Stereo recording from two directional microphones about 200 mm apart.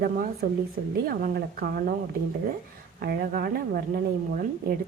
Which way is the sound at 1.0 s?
50° right (ahead or behind).